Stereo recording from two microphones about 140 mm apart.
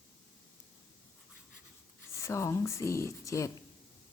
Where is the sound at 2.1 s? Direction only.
20° left (ahead or behind).